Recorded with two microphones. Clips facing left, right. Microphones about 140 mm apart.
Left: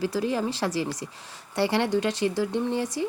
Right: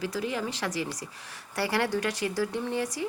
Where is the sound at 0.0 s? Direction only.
35° left (ahead or behind).